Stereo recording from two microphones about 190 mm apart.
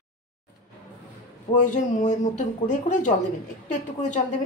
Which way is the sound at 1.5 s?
40° left (ahead or behind).